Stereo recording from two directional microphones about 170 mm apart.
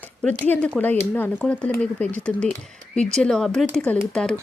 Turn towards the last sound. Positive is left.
turn(degrees=5)  # may be behind; listen again after turning